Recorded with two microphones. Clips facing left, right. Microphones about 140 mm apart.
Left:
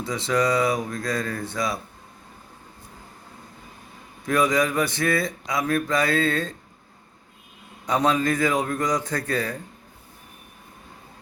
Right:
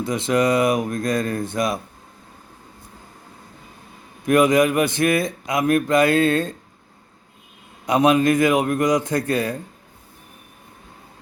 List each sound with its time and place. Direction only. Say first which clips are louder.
0.1 s speech: right 3 dB; 15° right (ahead or behind)
4.5 s speech: right 5 dB; 15° right (ahead or behind)
7.9 s speech: right 5 dB; 15° right (ahead or behind)